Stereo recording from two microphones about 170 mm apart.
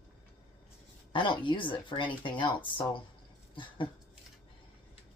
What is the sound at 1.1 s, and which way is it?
Speech, 30° left (ahead or behind).